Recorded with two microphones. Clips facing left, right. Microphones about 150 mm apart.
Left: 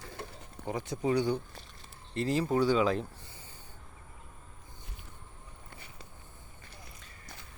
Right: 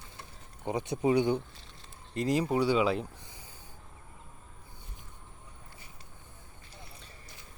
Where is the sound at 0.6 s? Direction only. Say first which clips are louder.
Right 3 dB; 20° right (ahead or behind).